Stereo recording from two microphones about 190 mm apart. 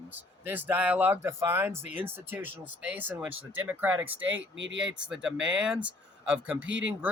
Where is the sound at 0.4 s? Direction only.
10° right (ahead or behind).